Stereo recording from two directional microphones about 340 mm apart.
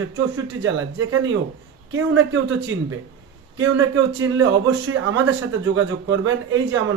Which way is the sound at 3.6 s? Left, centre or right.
Right.